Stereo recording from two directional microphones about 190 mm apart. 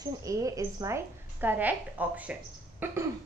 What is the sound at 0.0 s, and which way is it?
A woman's voice, 20° right (ahead or behind).